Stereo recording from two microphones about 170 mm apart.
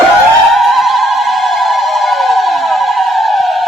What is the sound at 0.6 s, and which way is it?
Theremin, centre (ahead or behind).